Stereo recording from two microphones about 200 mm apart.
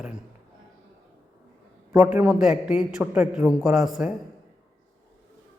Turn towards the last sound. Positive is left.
turn(degrees=0)  # may be behind; listen again after turning